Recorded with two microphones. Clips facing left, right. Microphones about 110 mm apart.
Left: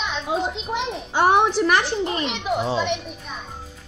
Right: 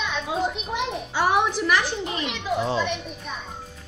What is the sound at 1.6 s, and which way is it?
Speech, 45° left (ahead or behind).